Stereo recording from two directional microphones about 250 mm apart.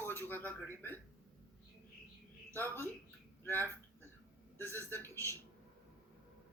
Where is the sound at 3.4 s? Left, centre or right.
Centre.